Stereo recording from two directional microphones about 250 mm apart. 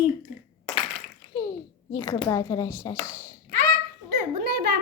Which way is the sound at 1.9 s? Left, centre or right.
Centre.